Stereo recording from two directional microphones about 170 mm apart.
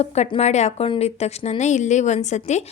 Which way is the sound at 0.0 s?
40° left (ahead or behind).